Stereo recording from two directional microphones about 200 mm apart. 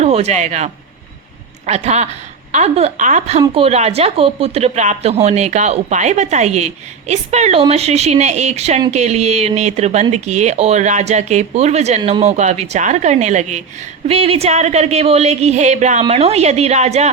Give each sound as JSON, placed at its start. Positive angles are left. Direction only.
{"t": 0.0, "sound": "speech", "side_deg": -35}